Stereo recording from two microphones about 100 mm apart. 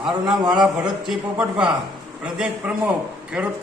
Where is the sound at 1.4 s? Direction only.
10° right (ahead or behind).